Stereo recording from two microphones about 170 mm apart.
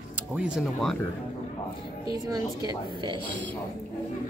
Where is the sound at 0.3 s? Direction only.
Centre (ahead or behind).